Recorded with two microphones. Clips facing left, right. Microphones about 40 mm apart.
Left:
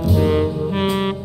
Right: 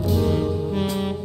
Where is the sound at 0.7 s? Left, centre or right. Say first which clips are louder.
Left 5 dB; left.